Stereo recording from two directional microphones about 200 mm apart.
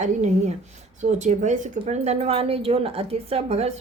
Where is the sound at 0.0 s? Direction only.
35° right (ahead or behind).